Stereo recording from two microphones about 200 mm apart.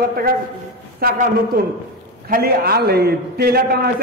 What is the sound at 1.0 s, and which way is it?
A man's voice, 40° right (ahead or behind).